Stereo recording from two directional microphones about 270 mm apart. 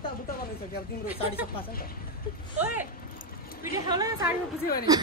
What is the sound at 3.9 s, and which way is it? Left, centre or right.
A woman's voice, centre.